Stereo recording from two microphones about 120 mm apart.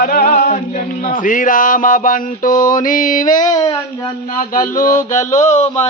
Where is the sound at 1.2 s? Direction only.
90° left.